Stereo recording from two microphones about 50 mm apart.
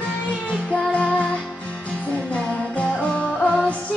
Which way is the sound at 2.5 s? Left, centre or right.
Left.